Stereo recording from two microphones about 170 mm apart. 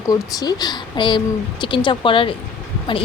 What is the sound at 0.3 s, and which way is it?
Speech, 25° left (ahead or behind).